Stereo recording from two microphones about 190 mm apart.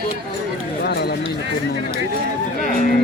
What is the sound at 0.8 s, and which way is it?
Run, 60° left (ahead or behind).